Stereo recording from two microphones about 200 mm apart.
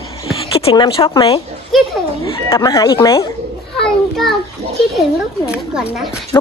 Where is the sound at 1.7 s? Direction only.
Centre (ahead or behind).